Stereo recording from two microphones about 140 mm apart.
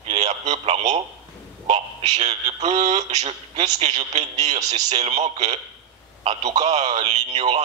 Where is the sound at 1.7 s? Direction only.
45° right (ahead or behind).